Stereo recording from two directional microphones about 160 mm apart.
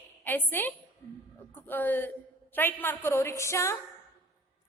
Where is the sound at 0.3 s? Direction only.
10° left (ahead or behind).